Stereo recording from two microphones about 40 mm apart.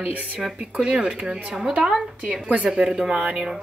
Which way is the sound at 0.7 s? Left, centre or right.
Right.